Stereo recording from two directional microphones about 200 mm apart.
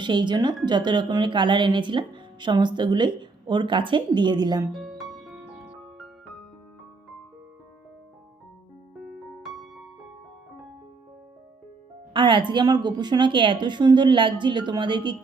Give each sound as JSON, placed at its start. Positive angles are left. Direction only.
{"t": 0.0, "sound": "a woman's voice", "side_deg": -20}
{"t": 4.7, "sound": "music", "side_deg": 0}
{"t": 9.0, "sound": "music", "side_deg": 0}
{"t": 12.1, "sound": "a woman's voice", "side_deg": -25}